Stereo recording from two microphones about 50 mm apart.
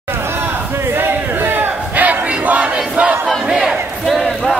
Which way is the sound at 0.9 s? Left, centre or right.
Right.